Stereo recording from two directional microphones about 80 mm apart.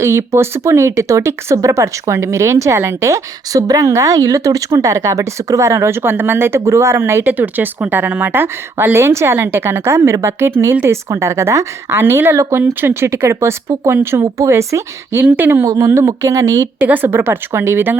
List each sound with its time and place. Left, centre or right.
0.0 s a woman's voice: right
15.6 s speech: right
16.8 s a woman's voice: right